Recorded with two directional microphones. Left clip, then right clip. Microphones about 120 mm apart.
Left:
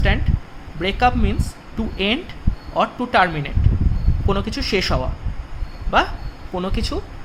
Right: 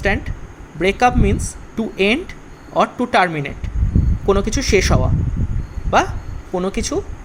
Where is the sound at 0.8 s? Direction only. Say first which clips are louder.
Right 3 dB; 40° right (ahead or behind).